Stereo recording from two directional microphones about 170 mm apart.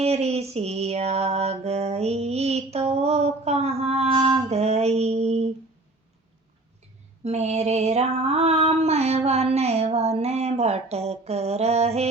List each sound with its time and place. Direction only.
0.0 s female singing: 40° right (ahead or behind)
4.1 s female singing: 25° right (ahead or behind)
4.4 s music: 40° right (ahead or behind)
7.3 s female singing: 40° right (ahead or behind)